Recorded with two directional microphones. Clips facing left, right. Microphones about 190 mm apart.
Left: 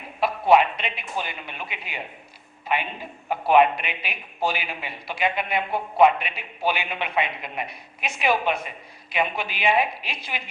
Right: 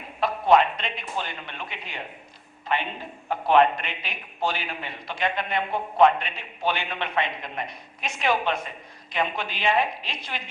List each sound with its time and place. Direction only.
0.2 s a man's voice: 10° left (ahead or behind)